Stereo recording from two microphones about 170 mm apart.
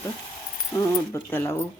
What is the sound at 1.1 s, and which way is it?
Speech, 15° left (ahead or behind).